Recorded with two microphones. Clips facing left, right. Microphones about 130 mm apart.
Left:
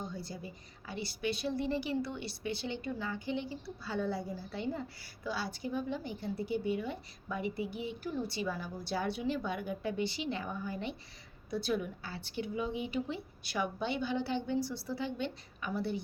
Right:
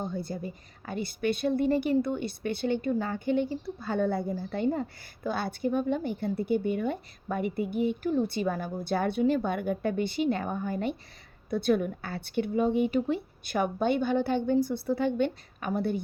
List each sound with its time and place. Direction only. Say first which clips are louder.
0.0 s a woman's voice: right 8 dB; 55° right (ahead or behind)